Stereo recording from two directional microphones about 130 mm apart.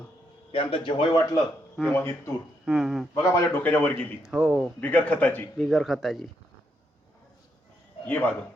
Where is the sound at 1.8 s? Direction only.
Centre (ahead or behind).